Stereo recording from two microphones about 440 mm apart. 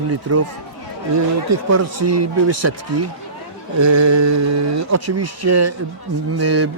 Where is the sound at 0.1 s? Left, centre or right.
Right.